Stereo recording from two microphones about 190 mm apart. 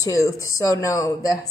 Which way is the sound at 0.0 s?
15° left (ahead or behind).